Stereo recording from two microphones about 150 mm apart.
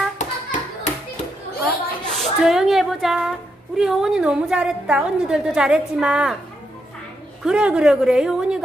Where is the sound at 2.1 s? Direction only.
Centre (ahead or behind).